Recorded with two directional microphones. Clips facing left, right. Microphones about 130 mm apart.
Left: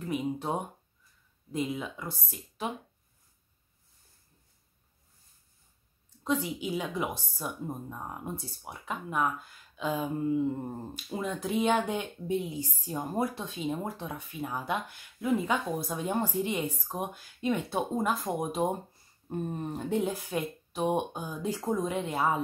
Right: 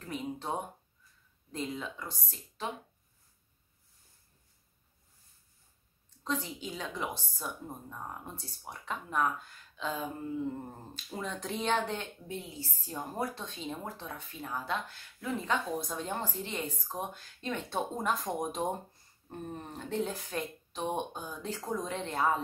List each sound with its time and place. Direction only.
0.0 s a woman's voice: 10° left (ahead or behind)
6.2 s a woman's voice: 10° left (ahead or behind)